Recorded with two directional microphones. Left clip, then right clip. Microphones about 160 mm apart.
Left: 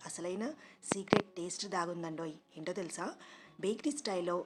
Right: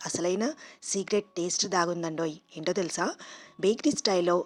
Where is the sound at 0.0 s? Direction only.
45° right (ahead or behind).